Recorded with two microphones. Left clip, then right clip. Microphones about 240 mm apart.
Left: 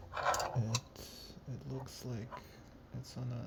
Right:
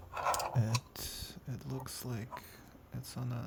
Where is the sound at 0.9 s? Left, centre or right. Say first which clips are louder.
Right 6 dB; right.